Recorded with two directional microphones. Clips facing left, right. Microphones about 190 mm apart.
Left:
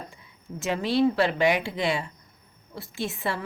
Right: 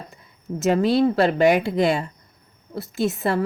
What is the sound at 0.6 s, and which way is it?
A woman's voice, 40° right (ahead or behind).